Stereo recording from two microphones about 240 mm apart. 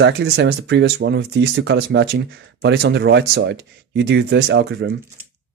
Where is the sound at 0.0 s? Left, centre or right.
Right.